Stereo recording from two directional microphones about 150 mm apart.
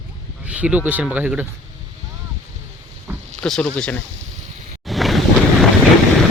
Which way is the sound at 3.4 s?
5° left (ahead or behind).